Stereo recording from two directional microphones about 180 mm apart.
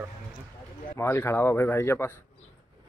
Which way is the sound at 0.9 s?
15° left (ahead or behind).